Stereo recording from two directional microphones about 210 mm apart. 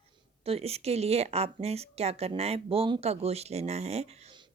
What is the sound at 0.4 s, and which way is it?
Speech, 30° right (ahead or behind).